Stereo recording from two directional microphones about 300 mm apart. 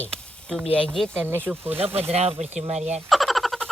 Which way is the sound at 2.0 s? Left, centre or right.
Right.